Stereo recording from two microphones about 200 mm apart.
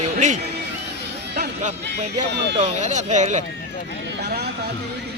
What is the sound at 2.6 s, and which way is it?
Speech, 30° right (ahead or behind).